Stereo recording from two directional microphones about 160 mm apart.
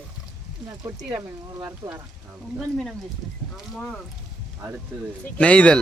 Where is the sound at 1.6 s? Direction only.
15° right (ahead or behind).